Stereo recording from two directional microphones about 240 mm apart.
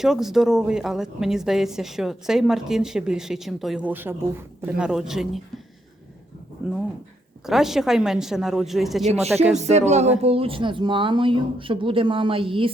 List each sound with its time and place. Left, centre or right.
0.0 s speech: centre
6.6 s speech: centre
9.0 s speech: right